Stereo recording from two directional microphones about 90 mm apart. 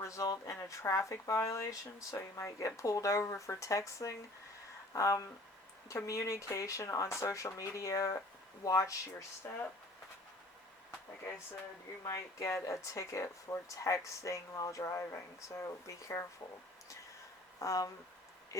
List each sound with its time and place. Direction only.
0.0 s speech: 35° left (ahead or behind)
12.0 s speech: 35° left (ahead or behind)
17.6 s speech: 35° left (ahead or behind)